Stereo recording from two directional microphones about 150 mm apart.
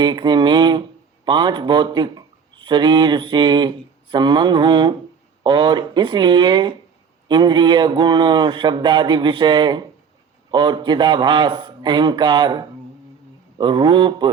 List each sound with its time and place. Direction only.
0.0 s a man's voice: 30° right (ahead or behind)
1.2 s mantra: 30° right (ahead or behind)
7.3 s a man's voice: 30° right (ahead or behind)
10.5 s mantra: 30° right (ahead or behind)